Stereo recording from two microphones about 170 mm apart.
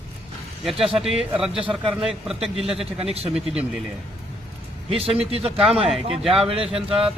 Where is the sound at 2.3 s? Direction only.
35° right (ahead or behind).